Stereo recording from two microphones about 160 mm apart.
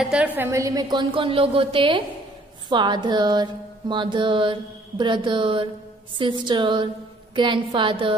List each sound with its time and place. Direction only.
0.0 s a woman's voice: 10° right (ahead or behind); by 3.4 s 25° right (ahead or behind)
3.9 s mantra: 30° right (ahead or behind)
6.1 s a woman's voice: 30° right (ahead or behind)
7.3 s mantra: 30° right (ahead or behind)